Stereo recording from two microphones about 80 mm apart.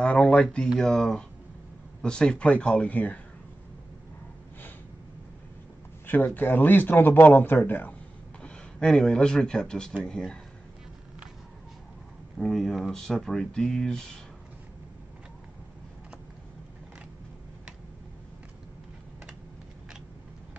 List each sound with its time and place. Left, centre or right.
0.0 s speech: centre
6.0 s speech: left
8.4 s speech: centre
12.4 s speech: centre